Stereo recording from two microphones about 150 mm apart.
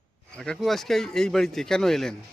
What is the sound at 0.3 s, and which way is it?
Speech, 5° left (ahead or behind).